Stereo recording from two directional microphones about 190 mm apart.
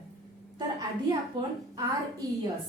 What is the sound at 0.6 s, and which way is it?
Speech, 20° right (ahead or behind).